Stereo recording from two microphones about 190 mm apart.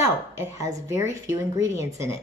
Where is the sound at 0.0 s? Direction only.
15° right (ahead or behind).